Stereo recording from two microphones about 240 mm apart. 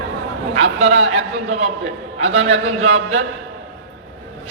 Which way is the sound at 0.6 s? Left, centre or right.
Right.